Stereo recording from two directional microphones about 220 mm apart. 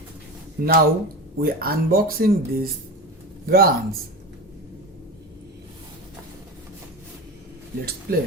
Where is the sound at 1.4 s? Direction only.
45° right (ahead or behind).